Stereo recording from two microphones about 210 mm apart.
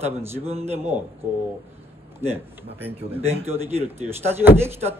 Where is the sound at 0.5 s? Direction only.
30° right (ahead or behind).